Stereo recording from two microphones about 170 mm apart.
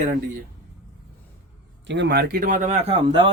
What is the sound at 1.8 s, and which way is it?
Speech, 90° right.